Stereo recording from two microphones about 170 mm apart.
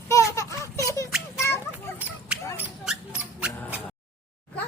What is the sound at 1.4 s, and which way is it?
Children playing, 15° left (ahead or behind).